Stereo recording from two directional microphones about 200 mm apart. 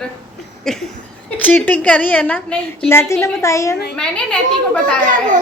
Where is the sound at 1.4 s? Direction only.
10° left (ahead or behind).